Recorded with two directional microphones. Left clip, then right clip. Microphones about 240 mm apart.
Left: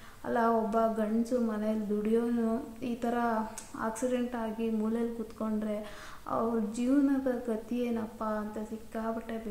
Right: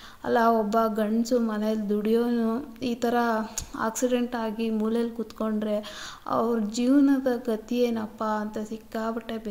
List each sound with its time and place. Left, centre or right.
0.2 s a woman's voice: right